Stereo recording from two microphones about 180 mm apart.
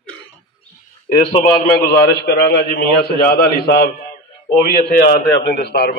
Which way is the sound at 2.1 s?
65° left (ahead or behind).